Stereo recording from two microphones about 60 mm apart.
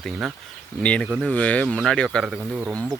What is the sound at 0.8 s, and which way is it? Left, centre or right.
Speech, centre.